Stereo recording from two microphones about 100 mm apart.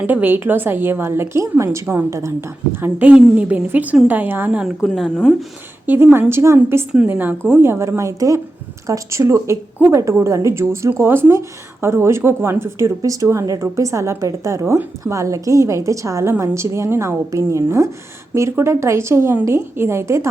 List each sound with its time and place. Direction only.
0.0 s speech: 15° right (ahead or behind)
2.7 s a woman's voice: 20° right (ahead or behind)
4.6 s a woman's voice: centre (ahead or behind)
5.8 s speech: 20° right (ahead or behind)
6.9 s a woman's voice: 15° right (ahead or behind)